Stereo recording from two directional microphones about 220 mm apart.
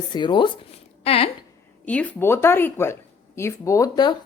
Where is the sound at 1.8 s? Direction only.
5° left (ahead or behind).